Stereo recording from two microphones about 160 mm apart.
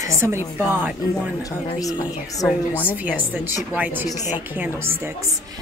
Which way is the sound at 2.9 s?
10° right (ahead or behind).